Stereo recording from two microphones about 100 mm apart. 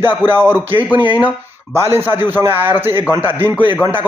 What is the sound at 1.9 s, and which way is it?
A man's voice, 20° right (ahead or behind).